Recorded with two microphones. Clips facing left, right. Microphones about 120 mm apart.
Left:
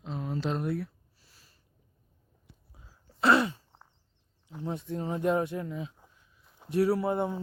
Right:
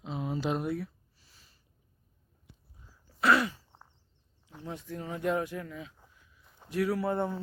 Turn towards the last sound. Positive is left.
turn(degrees=15)  # may be behind; listen again after turning